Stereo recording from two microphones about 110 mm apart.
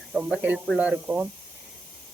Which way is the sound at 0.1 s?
10° right (ahead or behind).